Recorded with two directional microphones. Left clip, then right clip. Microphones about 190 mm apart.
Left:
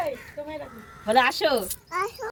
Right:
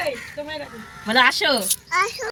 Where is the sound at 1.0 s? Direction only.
35° left (ahead or behind).